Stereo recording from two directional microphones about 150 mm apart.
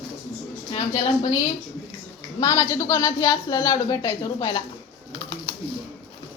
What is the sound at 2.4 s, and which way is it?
A woman's voice, 20° left (ahead or behind).